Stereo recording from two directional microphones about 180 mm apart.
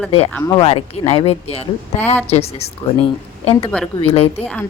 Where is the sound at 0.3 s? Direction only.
20° left (ahead or behind).